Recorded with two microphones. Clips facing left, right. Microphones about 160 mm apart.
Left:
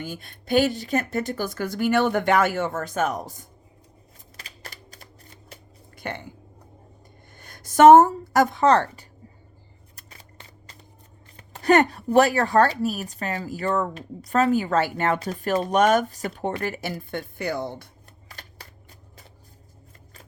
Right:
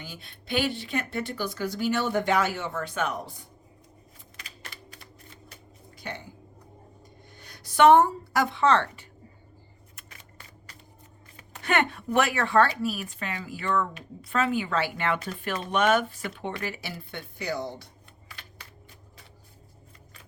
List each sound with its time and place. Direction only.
0.0 s speech: 50° left (ahead or behind)
4.4 s typewriter: 35° left (ahead or behind)
6.0 s a sound: 55° left (ahead or behind)
7.3 s a woman's voice: 50° left (ahead or behind)
9.9 s shuffling cards: 30° left (ahead or behind)
11.3 s speech: 40° left (ahead or behind)
18.3 s shuffling cards: 40° left (ahead or behind)